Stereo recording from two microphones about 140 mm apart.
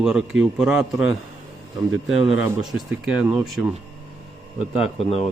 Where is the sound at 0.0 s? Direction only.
5° right (ahead or behind).